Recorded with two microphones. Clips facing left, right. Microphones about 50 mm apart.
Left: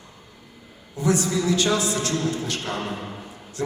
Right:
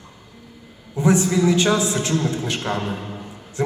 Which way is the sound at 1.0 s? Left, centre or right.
Right.